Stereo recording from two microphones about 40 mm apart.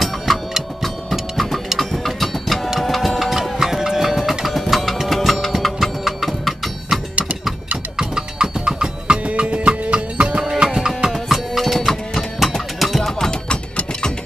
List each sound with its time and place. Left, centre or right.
1.1 s printer: centre
1.8 s a sound: centre
2.8 s music: centre
8.0 s music: centre
9.2 s music: right
11.1 s music: centre
13.3 s mechanisms: left